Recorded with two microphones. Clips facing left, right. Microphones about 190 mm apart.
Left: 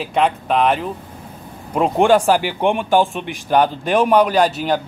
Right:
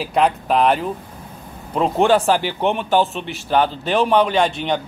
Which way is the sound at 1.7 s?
10° left (ahead or behind).